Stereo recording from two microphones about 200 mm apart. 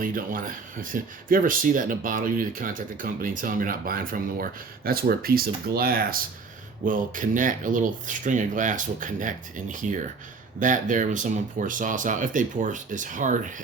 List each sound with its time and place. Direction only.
0.0 s speech: 45° right (ahead or behind)